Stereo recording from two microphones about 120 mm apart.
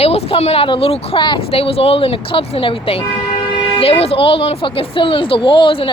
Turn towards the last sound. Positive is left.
turn(degrees=45)  # may be behind; listen again after turning